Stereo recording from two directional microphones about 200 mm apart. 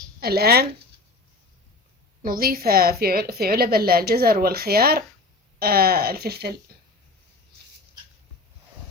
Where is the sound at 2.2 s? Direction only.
50° right (ahead or behind).